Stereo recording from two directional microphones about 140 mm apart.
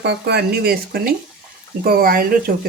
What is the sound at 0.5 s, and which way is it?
Speech, 90° right.